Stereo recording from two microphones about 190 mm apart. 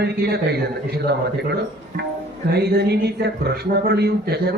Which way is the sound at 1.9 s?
40° right (ahead or behind).